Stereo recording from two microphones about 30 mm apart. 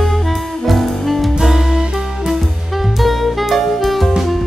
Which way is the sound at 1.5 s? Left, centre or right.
Centre.